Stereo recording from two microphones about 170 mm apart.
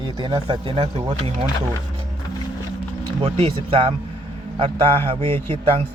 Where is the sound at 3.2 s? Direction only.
35° right (ahead or behind).